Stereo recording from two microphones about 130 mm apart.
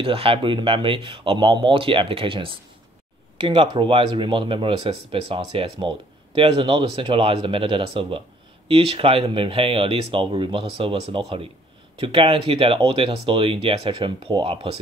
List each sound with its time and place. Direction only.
0.0 s speech: 45° right (ahead or behind)